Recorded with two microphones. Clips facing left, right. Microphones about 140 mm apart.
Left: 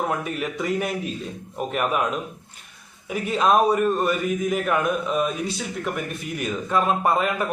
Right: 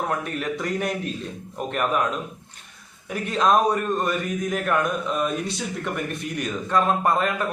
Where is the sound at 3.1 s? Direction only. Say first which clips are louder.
Left 1 dB; 5° left (ahead or behind).